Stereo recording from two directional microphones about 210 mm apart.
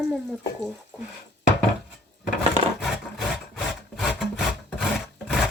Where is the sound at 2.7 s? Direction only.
Centre (ahead or behind).